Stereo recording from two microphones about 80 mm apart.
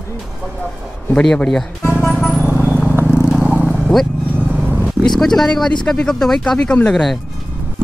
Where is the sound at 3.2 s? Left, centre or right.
Centre.